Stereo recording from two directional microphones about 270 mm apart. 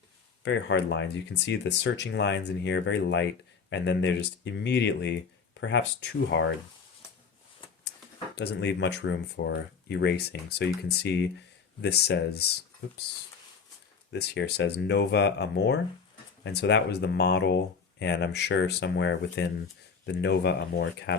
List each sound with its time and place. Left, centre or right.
0.4 s speech: left
8.4 s speech: left
14.1 s speech: left